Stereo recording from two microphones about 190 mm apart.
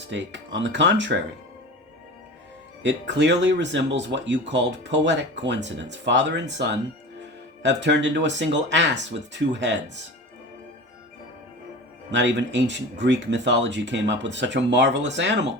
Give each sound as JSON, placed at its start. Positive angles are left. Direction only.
{"t": 0.1, "sound": "speech", "side_deg": -70}
{"t": 2.8, "sound": "speech", "side_deg": -70}
{"t": 12.1, "sound": "speech", "side_deg": -70}